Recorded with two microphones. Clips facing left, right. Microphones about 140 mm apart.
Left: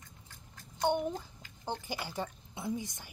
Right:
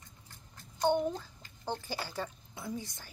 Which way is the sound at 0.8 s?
15° left (ahead or behind).